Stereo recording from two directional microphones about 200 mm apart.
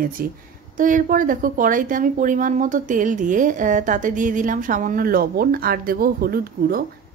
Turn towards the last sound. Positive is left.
turn(degrees=-45)  # may be behind; listen again after turning